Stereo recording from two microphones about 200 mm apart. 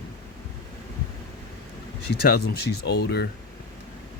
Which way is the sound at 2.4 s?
55° left (ahead or behind).